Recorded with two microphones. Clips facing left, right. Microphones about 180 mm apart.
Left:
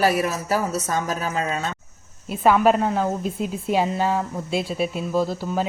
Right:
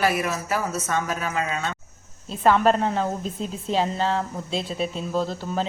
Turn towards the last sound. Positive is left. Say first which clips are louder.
# left 3 dB
turn(degrees=10)  # may be behind; listen again after turning